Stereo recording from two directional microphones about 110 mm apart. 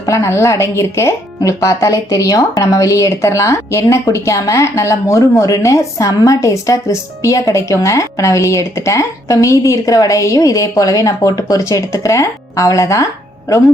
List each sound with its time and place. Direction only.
0.0 s a woman's voice: 30° left (ahead or behind)